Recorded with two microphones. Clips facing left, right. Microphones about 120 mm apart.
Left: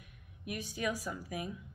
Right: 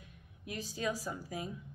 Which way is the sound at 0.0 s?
25° right (ahead or behind).